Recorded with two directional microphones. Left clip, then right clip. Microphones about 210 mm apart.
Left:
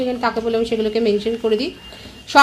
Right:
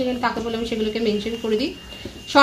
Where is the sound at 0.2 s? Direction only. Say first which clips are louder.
Left 5 dB; 50° left (ahead or behind).